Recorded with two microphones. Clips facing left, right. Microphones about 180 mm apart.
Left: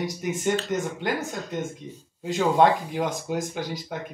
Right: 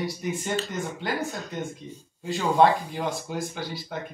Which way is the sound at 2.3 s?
15° left (ahead or behind).